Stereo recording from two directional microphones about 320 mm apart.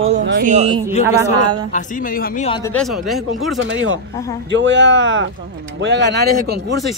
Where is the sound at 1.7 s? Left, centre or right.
Left.